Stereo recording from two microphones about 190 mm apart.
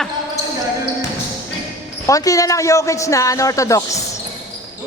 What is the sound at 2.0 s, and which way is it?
A woman's voice, 15° left (ahead or behind).